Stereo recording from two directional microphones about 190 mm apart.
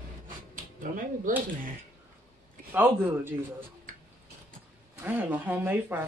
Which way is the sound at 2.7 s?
10° right (ahead or behind).